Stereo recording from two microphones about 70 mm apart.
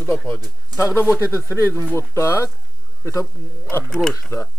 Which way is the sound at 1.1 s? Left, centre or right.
Left.